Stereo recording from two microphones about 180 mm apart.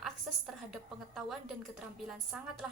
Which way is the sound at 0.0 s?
Centre (ahead or behind).